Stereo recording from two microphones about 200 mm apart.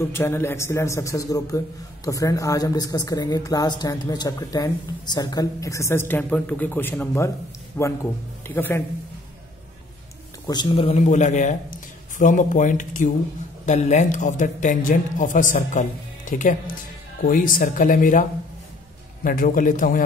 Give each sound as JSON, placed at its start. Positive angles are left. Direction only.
{"t": 0.0, "sound": "speech", "side_deg": 10}
{"t": 10.4, "sound": "a man's voice", "side_deg": 20}
{"t": 19.2, "sound": "a man's voice", "side_deg": 45}